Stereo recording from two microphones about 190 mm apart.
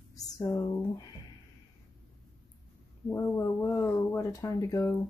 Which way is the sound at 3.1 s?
15° left (ahead or behind).